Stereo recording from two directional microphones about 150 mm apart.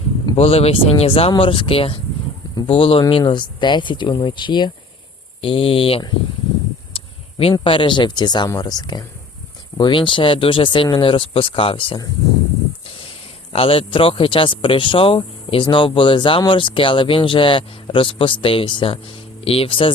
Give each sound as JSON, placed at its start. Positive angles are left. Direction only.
{"t": 0.3, "sound": "speech", "side_deg": 40}
{"t": 6.9, "sound": "a sound", "side_deg": 40}
{"t": 7.5, "sound": "speech", "side_deg": 35}
{"t": 13.5, "sound": "speech", "side_deg": 40}